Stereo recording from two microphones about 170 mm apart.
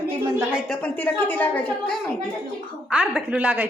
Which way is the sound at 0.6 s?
10° left (ahead or behind).